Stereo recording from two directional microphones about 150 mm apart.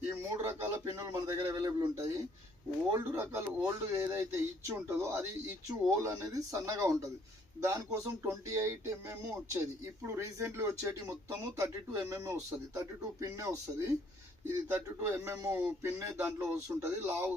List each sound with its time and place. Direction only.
0.3 s speech: 20° right (ahead or behind)